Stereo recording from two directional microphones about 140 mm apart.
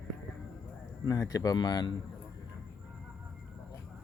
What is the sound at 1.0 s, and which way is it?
Speech, 25° left (ahead or behind).